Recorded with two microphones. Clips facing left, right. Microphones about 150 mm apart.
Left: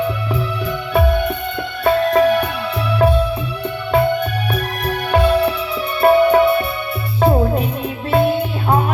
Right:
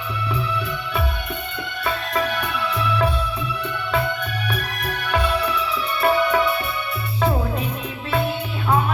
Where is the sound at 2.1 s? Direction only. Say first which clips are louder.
Left 8 dB; 35° left (ahead or behind).